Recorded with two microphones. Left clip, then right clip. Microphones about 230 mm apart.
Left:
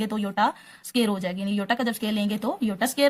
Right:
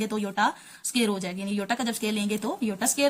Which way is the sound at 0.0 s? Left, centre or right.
Left.